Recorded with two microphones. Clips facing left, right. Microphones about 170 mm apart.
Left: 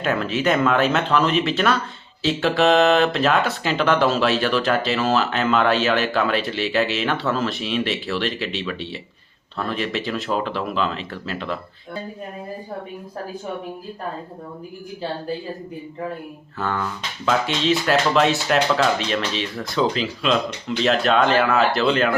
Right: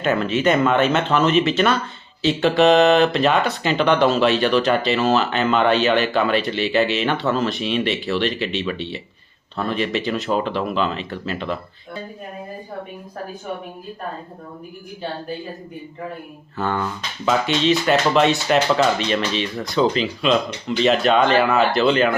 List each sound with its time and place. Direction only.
0.0 s speech: centre (ahead or behind)
16.6 s speech: centre (ahead or behind)